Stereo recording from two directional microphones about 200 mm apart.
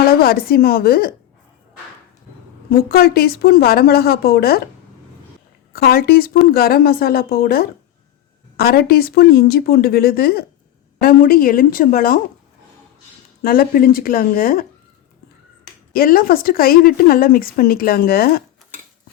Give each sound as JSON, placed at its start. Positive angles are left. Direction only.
{"t": 0.2, "sound": "speech", "side_deg": 50}
{"t": 2.6, "sound": "speech", "side_deg": 50}
{"t": 5.7, "sound": "speech", "side_deg": 50}
{"t": 13.4, "sound": "speech", "side_deg": 50}
{"t": 15.9, "sound": "speech", "side_deg": 45}